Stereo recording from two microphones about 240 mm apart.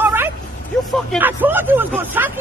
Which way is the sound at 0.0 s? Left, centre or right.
Centre.